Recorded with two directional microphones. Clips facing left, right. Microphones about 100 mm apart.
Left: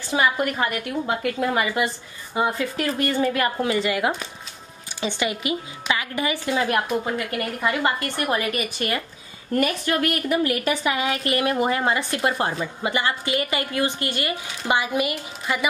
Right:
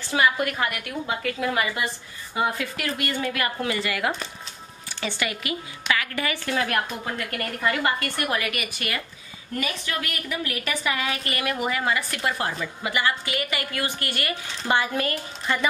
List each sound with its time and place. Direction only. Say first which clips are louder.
0.1 s a woman's voice: left 1 dB; 25° left (ahead or behind)
1.6 s a woman's voice: left 3 dB; 15° left (ahead or behind)
2.5 s a woman's voice: left 5 dB; 30° left (ahead or behind)
9.5 s speech: left 7 dB; 50° left (ahead or behind)
11.1 s a woman's voice: left 5 dB; 35° left (ahead or behind); by 15.6 s 10° left (ahead or behind)